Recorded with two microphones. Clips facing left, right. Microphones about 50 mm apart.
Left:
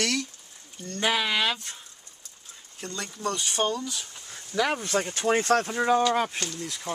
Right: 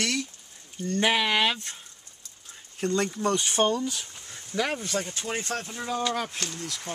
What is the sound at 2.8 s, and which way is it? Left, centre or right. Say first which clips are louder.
Speech: right 6 dB; right.